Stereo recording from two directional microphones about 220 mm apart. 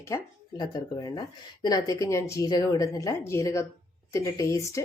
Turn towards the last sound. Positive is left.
turn(degrees=15)  # may be behind; listen again after turning